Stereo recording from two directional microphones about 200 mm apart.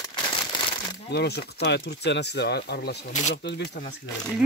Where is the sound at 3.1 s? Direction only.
35° left (ahead or behind).